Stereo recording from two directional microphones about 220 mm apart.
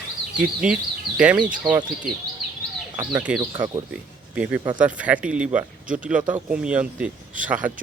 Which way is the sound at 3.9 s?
5° right (ahead or behind).